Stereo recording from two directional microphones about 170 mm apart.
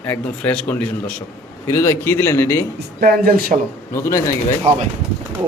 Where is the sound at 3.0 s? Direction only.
60° right (ahead or behind).